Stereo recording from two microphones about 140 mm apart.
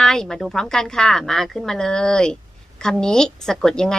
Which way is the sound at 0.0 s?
5° left (ahead or behind).